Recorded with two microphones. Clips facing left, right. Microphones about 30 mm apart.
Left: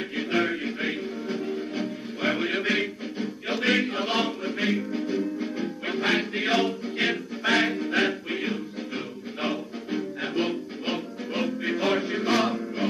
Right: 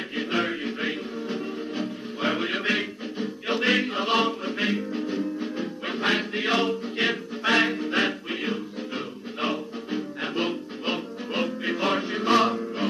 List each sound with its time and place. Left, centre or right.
0.7 s music: right
2.3 s music: right
2.6 s music: right
12.1 s chant: right